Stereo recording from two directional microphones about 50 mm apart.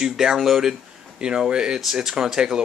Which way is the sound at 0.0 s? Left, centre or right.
Centre.